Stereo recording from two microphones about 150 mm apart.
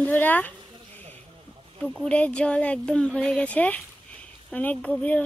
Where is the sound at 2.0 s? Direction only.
10° left (ahead or behind).